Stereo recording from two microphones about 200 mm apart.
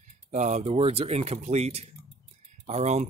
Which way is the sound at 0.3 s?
35° right (ahead or behind).